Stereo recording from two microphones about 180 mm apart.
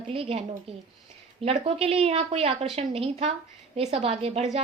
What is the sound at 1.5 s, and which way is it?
A woman's voice, 35° right (ahead or behind).